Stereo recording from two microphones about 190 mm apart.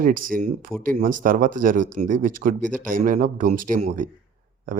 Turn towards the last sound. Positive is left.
turn(degrees=-45)  # may be behind; listen again after turning